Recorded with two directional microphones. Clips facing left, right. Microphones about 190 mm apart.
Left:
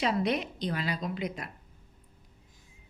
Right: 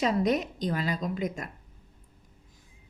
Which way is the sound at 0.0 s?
40° right (ahead or behind).